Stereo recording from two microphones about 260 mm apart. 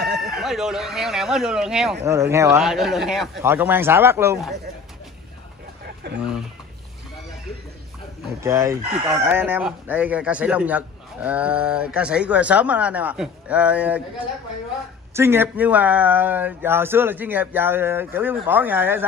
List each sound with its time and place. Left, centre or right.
0.2 s speech: centre
6.0 s chicken: right
8.4 s speech: centre
15.1 s speech: centre